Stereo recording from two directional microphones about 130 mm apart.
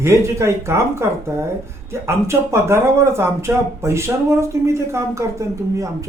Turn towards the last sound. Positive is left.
turn(degrees=-20)  # may be behind; listen again after turning